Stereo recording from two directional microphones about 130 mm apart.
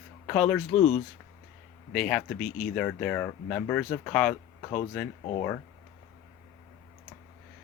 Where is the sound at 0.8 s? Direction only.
65° left (ahead or behind).